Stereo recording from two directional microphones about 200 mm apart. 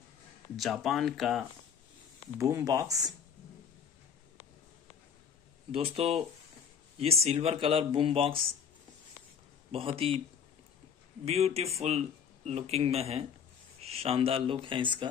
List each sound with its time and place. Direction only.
0.6 s speech: centre (ahead or behind)
2.3 s speech: 15° right (ahead or behind)
5.7 s speech: 30° right (ahead or behind)
7.2 s speech: 30° right (ahead or behind)
9.7 s speech: 30° right (ahead or behind)
11.2 s a man's voice: 30° right (ahead or behind)